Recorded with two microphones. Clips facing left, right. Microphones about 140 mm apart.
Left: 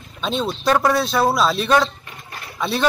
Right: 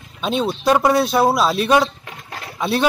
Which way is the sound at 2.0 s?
90° right.